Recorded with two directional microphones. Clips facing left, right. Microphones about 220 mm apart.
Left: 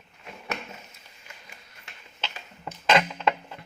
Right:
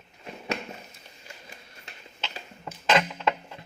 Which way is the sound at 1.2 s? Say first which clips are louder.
Right 3 dB; 30° right (ahead or behind).